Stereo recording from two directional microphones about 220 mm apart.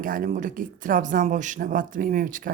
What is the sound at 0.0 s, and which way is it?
Speech, 40° right (ahead or behind).